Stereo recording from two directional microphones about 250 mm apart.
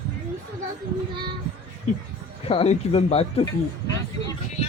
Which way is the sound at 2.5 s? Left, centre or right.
Left.